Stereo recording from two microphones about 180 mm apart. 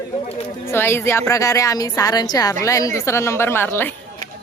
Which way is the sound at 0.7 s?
15° left (ahead or behind).